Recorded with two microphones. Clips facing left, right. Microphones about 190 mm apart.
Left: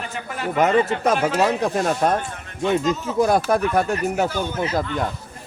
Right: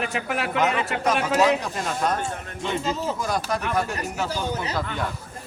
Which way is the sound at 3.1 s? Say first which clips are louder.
Left 9 dB; 55° left (ahead or behind).